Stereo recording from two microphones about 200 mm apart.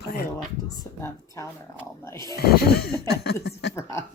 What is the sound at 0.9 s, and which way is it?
Speech, 20° left (ahead or behind).